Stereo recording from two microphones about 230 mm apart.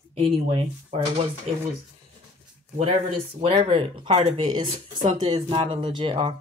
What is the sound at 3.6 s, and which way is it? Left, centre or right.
Speech, right.